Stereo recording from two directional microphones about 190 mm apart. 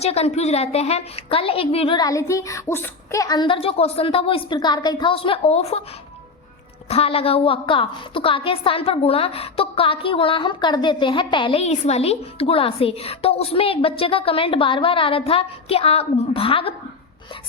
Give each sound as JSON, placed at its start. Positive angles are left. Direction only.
{"t": 0.0, "sound": "a woman's voice", "side_deg": 35}
{"t": 6.8, "sound": "a woman's voice", "side_deg": 30}